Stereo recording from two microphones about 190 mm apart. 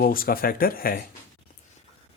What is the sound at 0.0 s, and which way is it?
Speech, 50° left (ahead or behind).